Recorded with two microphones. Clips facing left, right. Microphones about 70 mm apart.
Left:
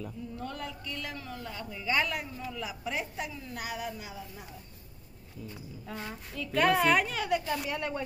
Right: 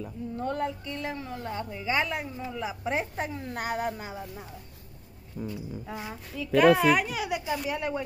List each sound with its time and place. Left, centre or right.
0.4 s a woman's voice: right
5.4 s speech: right
5.9 s speech: centre